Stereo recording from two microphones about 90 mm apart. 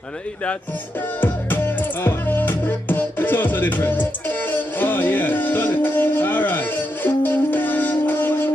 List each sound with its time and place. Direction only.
1.2 s music: 20° left (ahead or behind)